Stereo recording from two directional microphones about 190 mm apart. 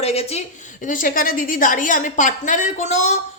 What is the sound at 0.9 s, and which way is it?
A woman's voice, 45° left (ahead or behind).